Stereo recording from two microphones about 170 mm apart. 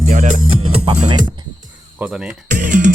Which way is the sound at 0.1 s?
50° right (ahead or behind).